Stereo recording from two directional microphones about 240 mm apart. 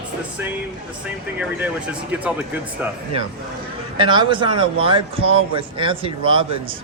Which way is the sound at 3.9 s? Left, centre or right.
Centre.